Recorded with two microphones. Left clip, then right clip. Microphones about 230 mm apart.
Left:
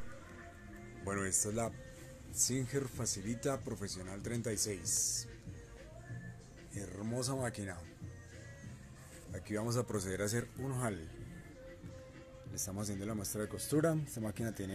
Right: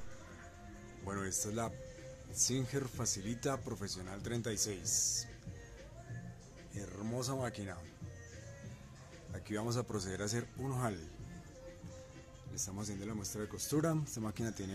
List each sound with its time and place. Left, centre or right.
1.0 s speech: centre
2.3 s speech: centre
6.7 s speech: centre
9.3 s speech: centre
12.6 s speech: centre